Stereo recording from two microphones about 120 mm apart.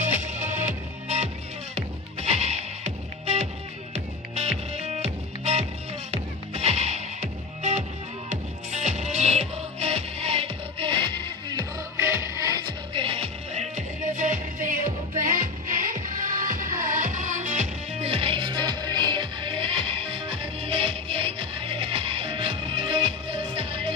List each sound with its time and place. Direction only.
0.0 s music: 80° right
1.0 s music: 65° right (ahead or behind); by 11.6 s 40° right (ahead or behind)
12.0 s music: 20° right (ahead or behind)
12.9 s music: 50° right (ahead or behind); by 17.6 s 90° right
18.0 s music: 50° right (ahead or behind)